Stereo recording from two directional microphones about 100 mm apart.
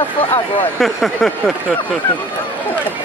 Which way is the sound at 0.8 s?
Centre (ahead or behind).